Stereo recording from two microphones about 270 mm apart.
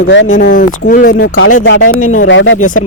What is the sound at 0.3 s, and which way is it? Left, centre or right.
Speech, left.